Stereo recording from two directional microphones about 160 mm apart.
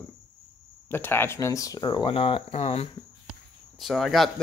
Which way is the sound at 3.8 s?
Centre (ahead or behind).